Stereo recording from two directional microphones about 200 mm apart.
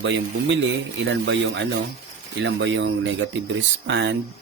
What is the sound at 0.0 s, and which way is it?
Speech, 65° right (ahead or behind).